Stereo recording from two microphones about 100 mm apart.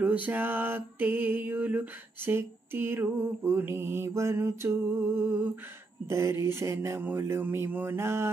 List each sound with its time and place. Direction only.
0.0 s mantra: 15° right (ahead or behind)